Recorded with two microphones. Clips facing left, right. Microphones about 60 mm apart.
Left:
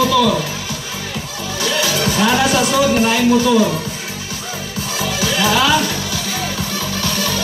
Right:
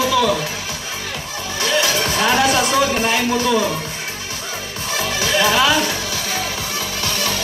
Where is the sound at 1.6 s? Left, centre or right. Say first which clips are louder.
Even; right.